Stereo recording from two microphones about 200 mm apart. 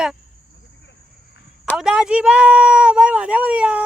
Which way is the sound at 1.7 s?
5° right (ahead or behind).